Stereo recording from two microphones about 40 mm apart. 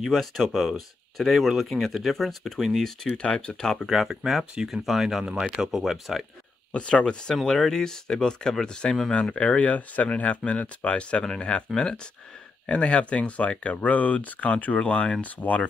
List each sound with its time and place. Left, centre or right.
0.1 s speech: centre
3.2 s speech: left
3.9 s speech: centre
6.7 s speech: left
7.4 s speech: centre
9.6 s speech: left; by 12.0 s centre
12.6 s speech: left
15.3 s speech: left